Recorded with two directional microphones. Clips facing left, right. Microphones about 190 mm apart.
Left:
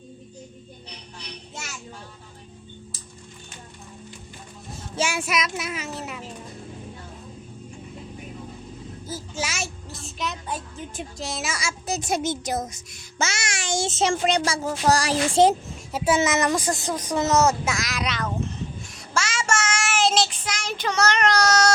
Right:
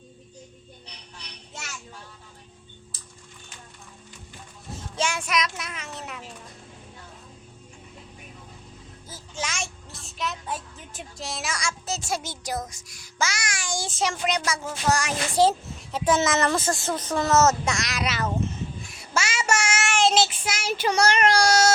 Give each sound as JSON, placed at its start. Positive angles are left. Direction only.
{"t": 4.9, "sound": "a child's voice", "side_deg": 5}
{"t": 9.0, "sound": "a sound", "side_deg": 5}
{"t": 10.0, "sound": "music", "side_deg": 0}
{"t": 11.9, "sound": "a child's voice", "side_deg": 20}
{"t": 15.4, "sound": "a child's voice", "side_deg": 10}
{"t": 17.7, "sound": "speech", "side_deg": 0}
{"t": 18.9, "sound": "child singing", "side_deg": -5}
{"t": 19.8, "sound": "child singing", "side_deg": 0}